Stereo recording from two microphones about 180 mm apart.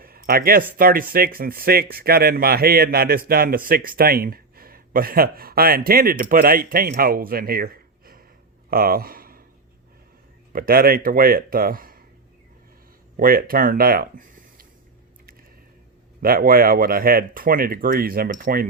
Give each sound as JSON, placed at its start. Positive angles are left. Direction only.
{"t": 0.0, "sound": "a sound", "side_deg": -55}
{"t": 0.8, "sound": "speech", "side_deg": -55}
{"t": 10.5, "sound": "speech", "side_deg": -55}
{"t": 13.1, "sound": "speech", "side_deg": -50}
{"t": 16.2, "sound": "speech", "side_deg": -55}